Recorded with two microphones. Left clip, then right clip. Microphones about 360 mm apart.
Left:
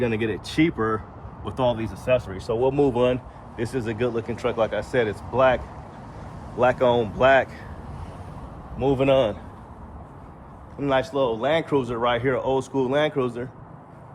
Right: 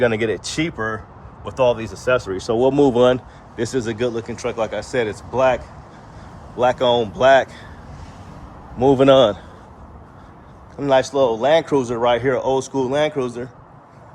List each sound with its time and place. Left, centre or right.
0.2 s speech: centre
8.8 s speech: right
10.8 s speech: centre